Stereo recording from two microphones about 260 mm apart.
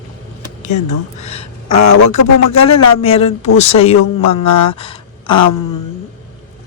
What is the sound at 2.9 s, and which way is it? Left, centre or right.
Speech, left.